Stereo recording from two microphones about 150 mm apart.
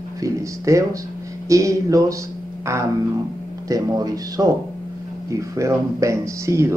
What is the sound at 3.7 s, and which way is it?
Speech, 25° right (ahead or behind).